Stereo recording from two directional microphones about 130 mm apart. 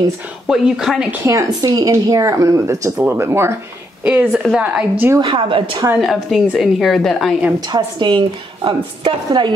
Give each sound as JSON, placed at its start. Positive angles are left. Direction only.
{"t": 0.5, "sound": "a woman's voice", "side_deg": -5}
{"t": 1.2, "sound": "a woman's voice", "side_deg": -25}
{"t": 5.2, "sound": "a woman's voice", "side_deg": -40}
{"t": 5.9, "sound": "a woman's voice", "side_deg": 0}
{"t": 7.7, "sound": "a woman's voice", "side_deg": -35}